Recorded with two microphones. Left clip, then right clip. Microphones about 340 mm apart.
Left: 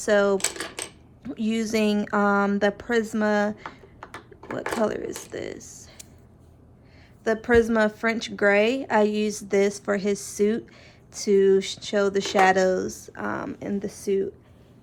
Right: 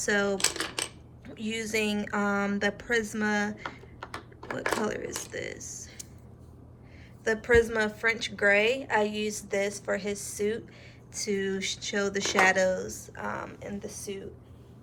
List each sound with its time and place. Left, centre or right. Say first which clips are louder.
0.0 s a woman's voice: left 6 dB; centre
3.7 s typing: even; centre
4.8 s a woman's voice: left 6 dB; centre
7.3 s a woman's voice: left 3 dB; centre